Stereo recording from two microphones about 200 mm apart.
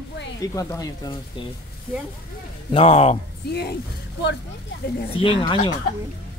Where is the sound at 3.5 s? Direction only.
55° left (ahead or behind).